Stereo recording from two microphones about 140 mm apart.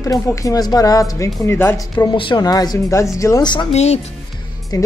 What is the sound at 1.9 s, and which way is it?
Speech, 30° left (ahead or behind).